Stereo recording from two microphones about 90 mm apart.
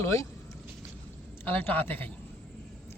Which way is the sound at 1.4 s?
20° left (ahead or behind).